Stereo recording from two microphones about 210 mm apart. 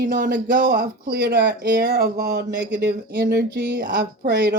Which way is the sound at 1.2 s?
50° right (ahead or behind).